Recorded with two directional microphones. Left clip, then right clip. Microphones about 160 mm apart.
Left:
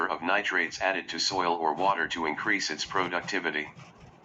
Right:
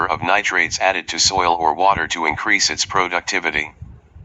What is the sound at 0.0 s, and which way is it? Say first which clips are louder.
Speech: right 10 dB; 40° right (ahead or behind).